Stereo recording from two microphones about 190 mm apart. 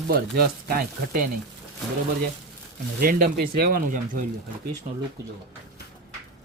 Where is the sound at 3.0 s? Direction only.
45° right (ahead or behind).